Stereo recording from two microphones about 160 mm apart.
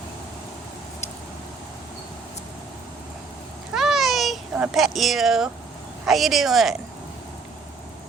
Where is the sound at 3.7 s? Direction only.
Centre (ahead or behind).